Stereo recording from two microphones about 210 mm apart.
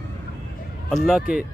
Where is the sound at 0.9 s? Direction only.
Centre (ahead or behind).